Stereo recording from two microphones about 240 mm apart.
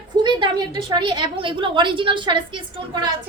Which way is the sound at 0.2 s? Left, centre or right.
Centre.